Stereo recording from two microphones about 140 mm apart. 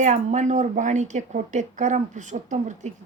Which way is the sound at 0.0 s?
55° right (ahead or behind).